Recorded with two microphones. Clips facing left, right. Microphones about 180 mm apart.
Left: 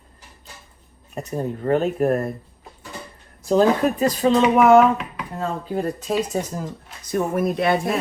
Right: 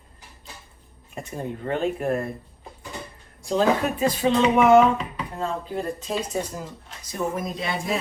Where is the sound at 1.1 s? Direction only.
40° left (ahead or behind).